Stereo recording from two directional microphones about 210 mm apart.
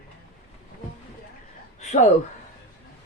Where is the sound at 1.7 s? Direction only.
35° left (ahead or behind).